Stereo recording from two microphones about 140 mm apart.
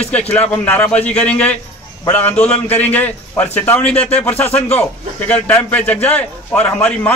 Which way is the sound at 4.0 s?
45° left (ahead or behind).